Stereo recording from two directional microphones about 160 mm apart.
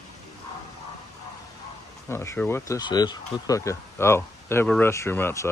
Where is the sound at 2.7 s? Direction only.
25° left (ahead or behind).